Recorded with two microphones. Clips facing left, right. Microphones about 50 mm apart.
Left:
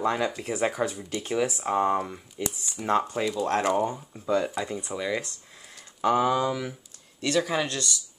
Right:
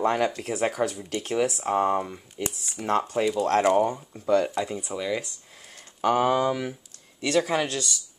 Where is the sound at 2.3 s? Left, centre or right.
Right.